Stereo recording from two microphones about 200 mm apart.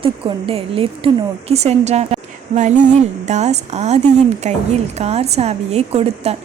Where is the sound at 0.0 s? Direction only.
25° right (ahead or behind).